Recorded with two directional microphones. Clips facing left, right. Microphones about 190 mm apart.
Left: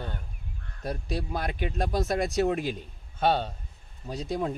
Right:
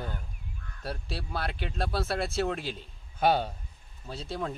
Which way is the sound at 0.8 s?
15° left (ahead or behind).